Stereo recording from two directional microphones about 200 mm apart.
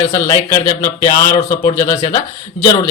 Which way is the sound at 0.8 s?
40° left (ahead or behind).